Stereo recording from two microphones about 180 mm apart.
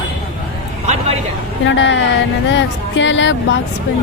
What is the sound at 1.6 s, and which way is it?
Speech, 90° left.